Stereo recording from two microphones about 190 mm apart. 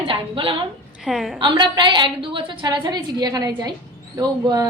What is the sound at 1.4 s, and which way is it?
A woman's voice, 25° right (ahead or behind).